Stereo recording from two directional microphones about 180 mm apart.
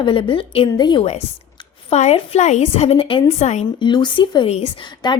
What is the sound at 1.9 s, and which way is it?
A woman's voice, 35° left (ahead or behind).